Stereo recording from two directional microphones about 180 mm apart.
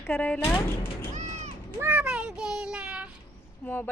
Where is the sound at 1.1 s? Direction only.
40° right (ahead or behind).